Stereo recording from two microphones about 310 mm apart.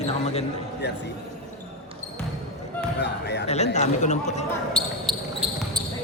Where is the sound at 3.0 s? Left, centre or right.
Left.